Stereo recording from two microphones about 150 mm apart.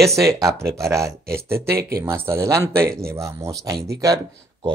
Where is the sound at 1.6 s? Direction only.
90° right.